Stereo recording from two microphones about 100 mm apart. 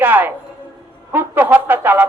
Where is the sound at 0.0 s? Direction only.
20° right (ahead or behind).